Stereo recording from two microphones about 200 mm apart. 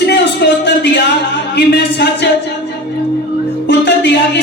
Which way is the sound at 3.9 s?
60° left (ahead or behind).